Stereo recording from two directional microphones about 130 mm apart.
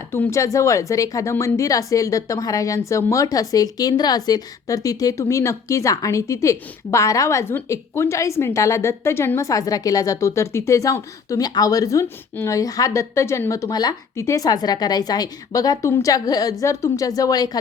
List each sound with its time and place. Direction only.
0.1 s speech: 20° left (ahead or behind)